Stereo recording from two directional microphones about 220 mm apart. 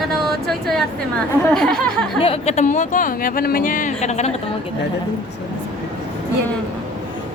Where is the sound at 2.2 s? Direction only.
30° left (ahead or behind).